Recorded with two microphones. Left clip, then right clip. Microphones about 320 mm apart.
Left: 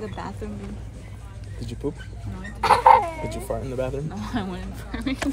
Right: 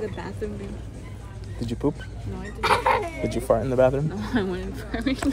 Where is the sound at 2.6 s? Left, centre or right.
Centre.